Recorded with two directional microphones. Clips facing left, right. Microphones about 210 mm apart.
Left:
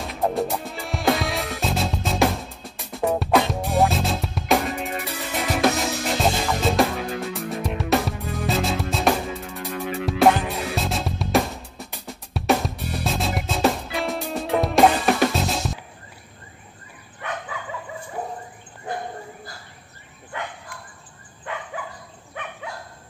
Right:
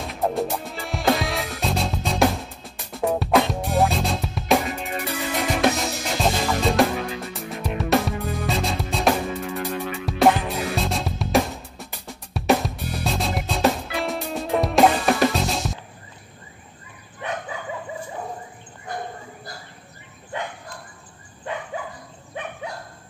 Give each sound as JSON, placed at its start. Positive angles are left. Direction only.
{"t": 0.0, "sound": "music", "side_deg": 0}